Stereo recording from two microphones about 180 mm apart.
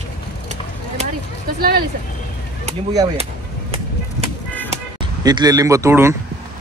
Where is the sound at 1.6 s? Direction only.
60° right (ahead or behind).